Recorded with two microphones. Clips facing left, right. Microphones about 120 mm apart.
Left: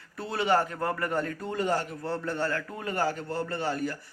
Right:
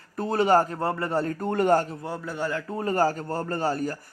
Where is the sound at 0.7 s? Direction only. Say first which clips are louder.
Right 3 dB; 30° right (ahead or behind).